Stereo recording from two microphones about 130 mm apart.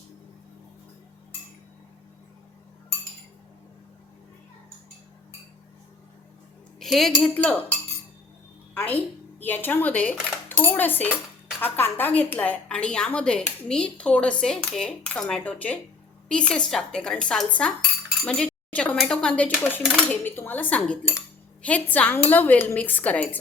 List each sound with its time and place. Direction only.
6.7 s a sound: centre (ahead or behind)
7.2 s a woman's voice: 10° left (ahead or behind)
8.7 s a woman's voice: 15° left (ahead or behind)